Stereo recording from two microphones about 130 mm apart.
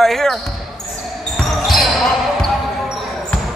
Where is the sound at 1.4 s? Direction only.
Centre (ahead or behind).